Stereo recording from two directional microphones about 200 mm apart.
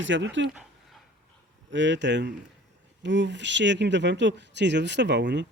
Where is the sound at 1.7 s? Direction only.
65° right (ahead or behind).